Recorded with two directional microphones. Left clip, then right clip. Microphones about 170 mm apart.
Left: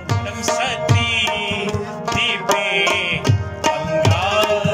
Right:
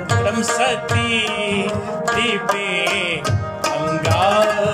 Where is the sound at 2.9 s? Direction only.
25° right (ahead or behind).